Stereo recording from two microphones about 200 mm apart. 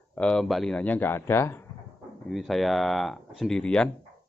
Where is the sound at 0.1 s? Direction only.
5° left (ahead or behind).